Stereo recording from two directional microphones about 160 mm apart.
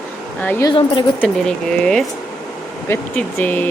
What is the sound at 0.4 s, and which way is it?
Speech, 15° left (ahead or behind).